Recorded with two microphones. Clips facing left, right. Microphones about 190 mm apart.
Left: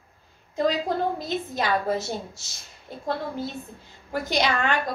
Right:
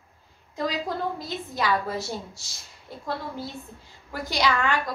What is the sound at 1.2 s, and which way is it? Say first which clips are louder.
Child singing: left 2 dB; 25° left (ahead or behind).